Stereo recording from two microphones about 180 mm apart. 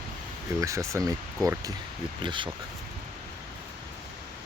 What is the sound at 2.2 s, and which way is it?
Speech, 25° right (ahead or behind).